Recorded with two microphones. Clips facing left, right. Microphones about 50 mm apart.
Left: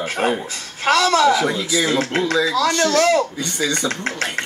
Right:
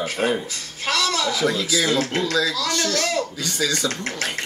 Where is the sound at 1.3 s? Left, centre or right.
Left.